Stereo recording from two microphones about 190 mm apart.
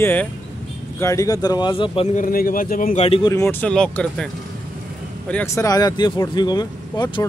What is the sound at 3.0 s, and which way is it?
Speech, 30° left (ahead or behind).